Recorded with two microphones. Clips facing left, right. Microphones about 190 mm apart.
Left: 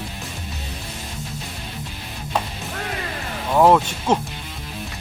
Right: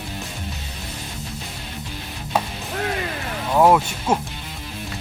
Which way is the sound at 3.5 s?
Centre (ahead or behind).